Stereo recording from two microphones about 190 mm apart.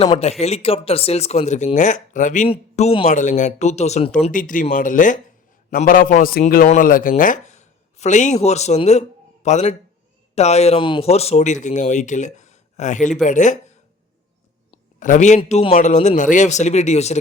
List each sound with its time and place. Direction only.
0.0 s a man's voice: 30° left (ahead or behind)
14.9 s speech: 45° left (ahead or behind)